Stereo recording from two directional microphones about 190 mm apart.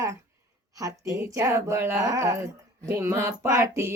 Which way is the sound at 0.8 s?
15° right (ahead or behind).